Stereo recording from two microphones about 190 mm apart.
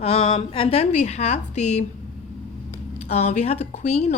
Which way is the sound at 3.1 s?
35° left (ahead or behind).